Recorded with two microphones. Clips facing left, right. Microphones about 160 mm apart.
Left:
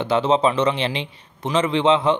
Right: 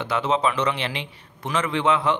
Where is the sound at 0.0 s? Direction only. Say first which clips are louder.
Left 5 dB; 30° left (ahead or behind).